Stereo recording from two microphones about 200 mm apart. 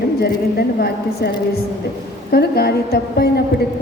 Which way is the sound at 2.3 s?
50° left (ahead or behind).